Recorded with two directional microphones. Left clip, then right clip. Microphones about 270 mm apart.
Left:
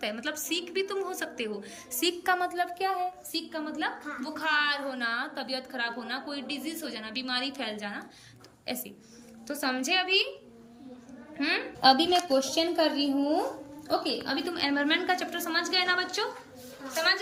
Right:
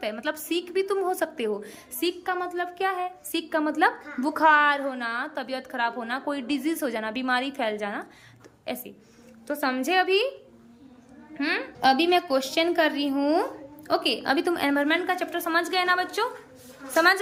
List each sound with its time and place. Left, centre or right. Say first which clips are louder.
0.0 s a woman's voice: right 3 dB; centre
11.3 s a woman's voice: right 2 dB; centre